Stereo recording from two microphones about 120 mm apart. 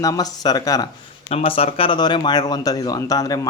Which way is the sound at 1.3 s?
55° left (ahead or behind).